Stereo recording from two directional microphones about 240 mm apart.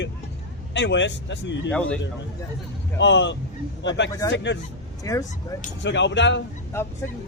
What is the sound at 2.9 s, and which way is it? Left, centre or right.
Speech, left.